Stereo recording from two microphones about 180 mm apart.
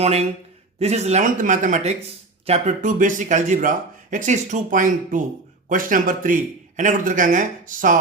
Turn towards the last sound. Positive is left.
turn(degrees=-45)  # may be behind; listen again after turning